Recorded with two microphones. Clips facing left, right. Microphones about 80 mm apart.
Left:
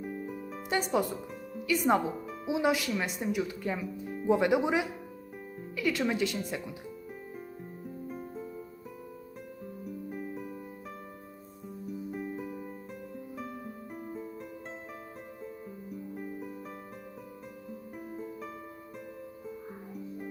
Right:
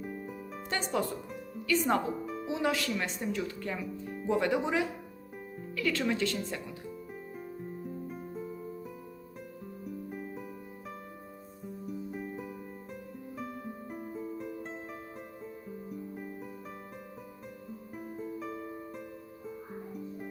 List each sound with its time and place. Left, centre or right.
0.0 s music: centre
0.7 s speech: centre
2.5 s speech: centre
7.9 s music: centre
9.8 s music: centre
12.1 s music: centre
17.9 s music: centre